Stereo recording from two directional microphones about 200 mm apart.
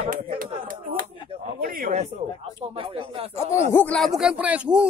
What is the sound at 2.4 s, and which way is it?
Speech, 25° right (ahead or behind).